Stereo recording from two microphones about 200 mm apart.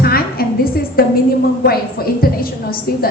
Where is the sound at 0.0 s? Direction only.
50° left (ahead or behind).